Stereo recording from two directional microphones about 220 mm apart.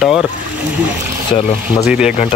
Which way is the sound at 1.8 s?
5° right (ahead or behind).